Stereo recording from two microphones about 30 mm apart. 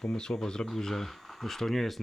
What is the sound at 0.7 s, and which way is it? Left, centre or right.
Speech, centre.